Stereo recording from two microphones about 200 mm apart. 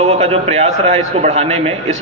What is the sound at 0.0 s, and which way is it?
A man's voice, 30° right (ahead or behind).